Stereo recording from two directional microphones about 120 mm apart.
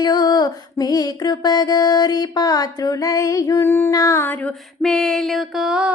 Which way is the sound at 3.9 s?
25° left (ahead or behind).